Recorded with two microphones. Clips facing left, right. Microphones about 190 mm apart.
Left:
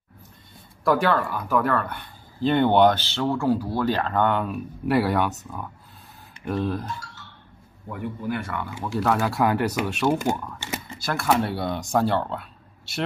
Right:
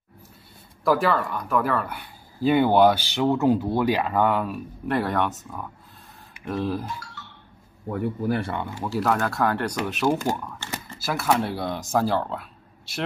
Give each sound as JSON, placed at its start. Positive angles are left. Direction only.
{"t": 0.8, "sound": "speech", "side_deg": 0}
{"t": 7.9, "sound": "speech", "side_deg": -40}
{"t": 8.9, "sound": "speech", "side_deg": 0}
{"t": 9.3, "sound": "speech", "side_deg": 10}
{"t": 10.6, "sound": "computer keyboard", "side_deg": 15}
{"t": 11.0, "sound": "speech", "side_deg": -5}